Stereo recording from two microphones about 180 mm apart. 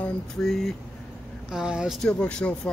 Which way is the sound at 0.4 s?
Centre (ahead or behind).